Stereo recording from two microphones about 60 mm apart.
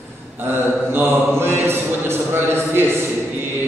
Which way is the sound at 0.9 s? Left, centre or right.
Right.